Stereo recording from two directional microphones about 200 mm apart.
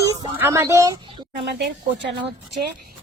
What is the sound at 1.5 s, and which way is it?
Speech, 60° right (ahead or behind).